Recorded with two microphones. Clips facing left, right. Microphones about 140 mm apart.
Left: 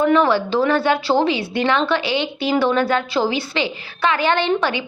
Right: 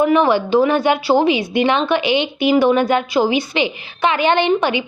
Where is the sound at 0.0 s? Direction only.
15° right (ahead or behind).